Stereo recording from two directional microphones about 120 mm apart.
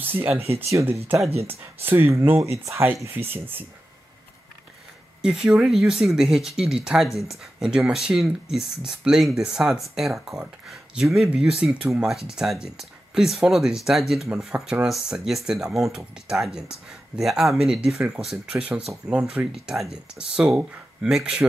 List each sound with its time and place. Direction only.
0.0 s speech: 15° right (ahead or behind)
0.3 s speech: 55° right (ahead or behind)
0.6 s speech: 20° right (ahead or behind)
5.2 s speech: 5° right (ahead or behind)